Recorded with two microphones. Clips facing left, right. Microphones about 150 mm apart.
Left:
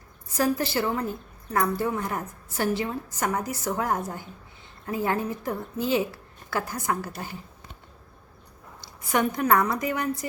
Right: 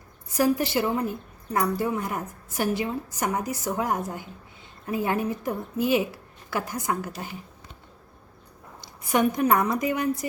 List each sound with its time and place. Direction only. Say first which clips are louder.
0.3 s a woman's voice: right 2 dB; 15° right (ahead or behind)
8.8 s a woman's voice: right 2 dB; 20° right (ahead or behind)